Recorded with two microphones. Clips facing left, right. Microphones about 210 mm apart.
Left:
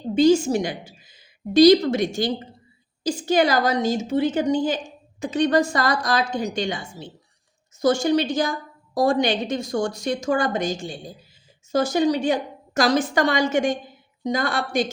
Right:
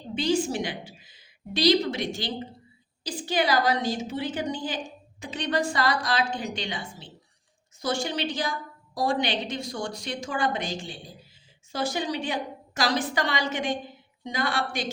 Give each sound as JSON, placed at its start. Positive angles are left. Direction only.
{"t": 0.1, "sound": "a woman's voice", "side_deg": 45}